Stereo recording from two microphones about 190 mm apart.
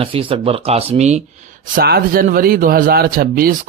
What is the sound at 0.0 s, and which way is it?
Speech, 30° right (ahead or behind).